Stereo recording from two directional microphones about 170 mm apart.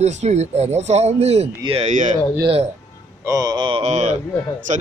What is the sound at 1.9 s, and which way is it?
Speech, 45° right (ahead or behind).